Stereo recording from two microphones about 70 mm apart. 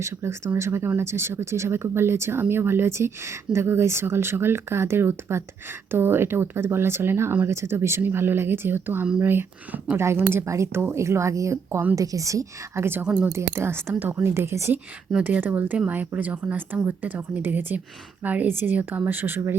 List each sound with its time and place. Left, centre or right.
0.0 s a woman's voice: right
13.3 s speech: right
15.2 s speech: right